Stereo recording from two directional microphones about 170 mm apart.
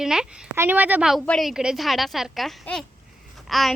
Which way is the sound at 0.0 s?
5° right (ahead or behind).